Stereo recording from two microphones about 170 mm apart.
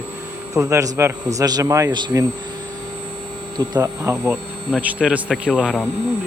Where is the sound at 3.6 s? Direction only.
20° right (ahead or behind).